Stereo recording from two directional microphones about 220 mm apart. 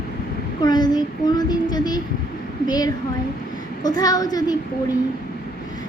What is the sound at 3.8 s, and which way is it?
Speech, 15° left (ahead or behind).